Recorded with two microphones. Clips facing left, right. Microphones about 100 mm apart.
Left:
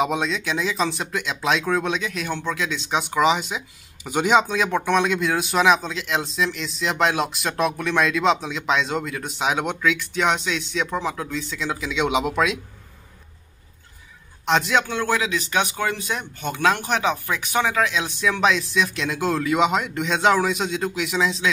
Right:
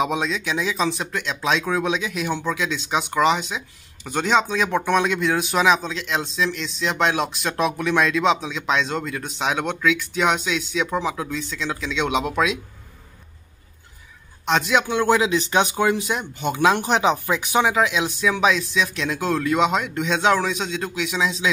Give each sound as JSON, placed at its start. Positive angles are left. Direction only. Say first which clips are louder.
{"t": 0.0, "sound": "speech", "louder": "even", "side_deg": 0}
{"t": 14.4, "sound": "a man's voice", "louder": "even", "side_deg": 0}
{"t": 14.9, "sound": "speech", "louder": "right 4 dB", "side_deg": -20}